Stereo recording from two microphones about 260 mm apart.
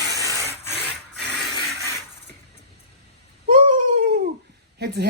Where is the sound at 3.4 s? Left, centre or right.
Right.